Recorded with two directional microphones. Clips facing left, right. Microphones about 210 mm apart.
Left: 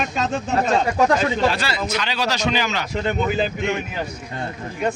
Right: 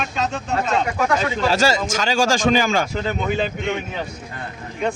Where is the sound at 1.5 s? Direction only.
45° right (ahead or behind).